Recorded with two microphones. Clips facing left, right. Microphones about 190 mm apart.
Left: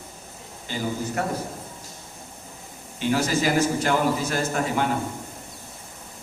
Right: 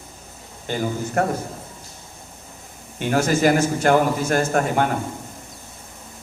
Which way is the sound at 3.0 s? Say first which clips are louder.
Right 4 dB; 50° right (ahead or behind).